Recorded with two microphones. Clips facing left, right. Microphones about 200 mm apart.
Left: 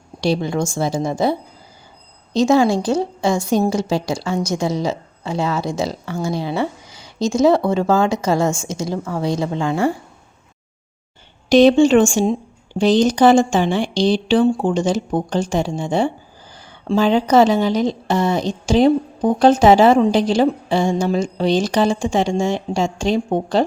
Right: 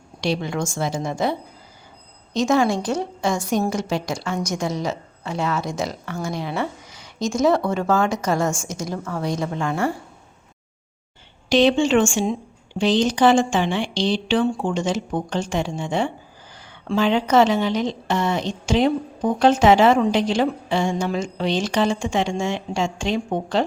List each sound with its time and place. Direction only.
0.2 s a woman's voice: 35° left (ahead or behind)
11.4 s a woman's voice: 45° left (ahead or behind)